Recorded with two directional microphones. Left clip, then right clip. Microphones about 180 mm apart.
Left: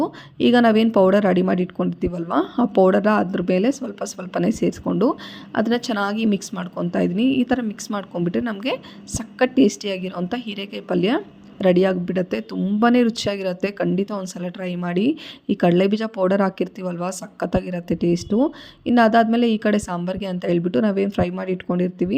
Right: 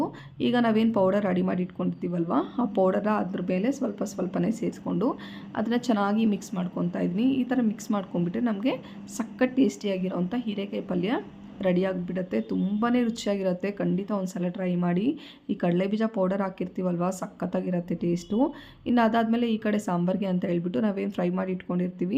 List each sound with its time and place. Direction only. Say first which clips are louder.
0.0 s speech: left 8 dB; 35° left (ahead or behind)